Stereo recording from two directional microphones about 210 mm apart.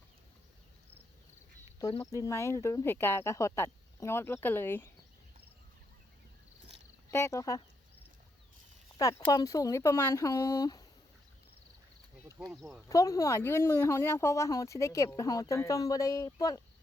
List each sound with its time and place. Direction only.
1.8 s speech: 20° left (ahead or behind)
7.1 s speech: 10° left (ahead or behind)
9.0 s speech: 15° left (ahead or behind)
12.5 s speech: centre (ahead or behind)
12.9 s speech: 15° left (ahead or behind)